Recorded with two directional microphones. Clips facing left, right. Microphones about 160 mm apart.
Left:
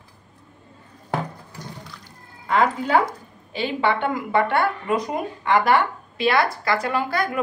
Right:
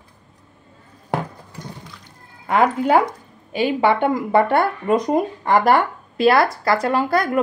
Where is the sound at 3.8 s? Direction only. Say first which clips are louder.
Right 3 dB; 45° right (ahead or behind).